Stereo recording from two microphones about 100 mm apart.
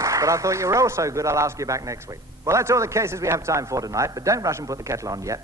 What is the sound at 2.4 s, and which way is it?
A man's voice, 30° right (ahead or behind).